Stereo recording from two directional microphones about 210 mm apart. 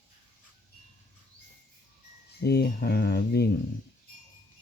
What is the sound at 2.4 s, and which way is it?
Speech, 50° left (ahead or behind).